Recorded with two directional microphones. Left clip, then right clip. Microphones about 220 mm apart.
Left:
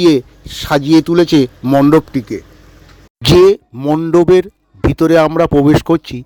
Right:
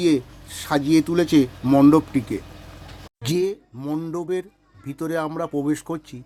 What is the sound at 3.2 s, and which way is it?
A man's voice, 40° left (ahead or behind).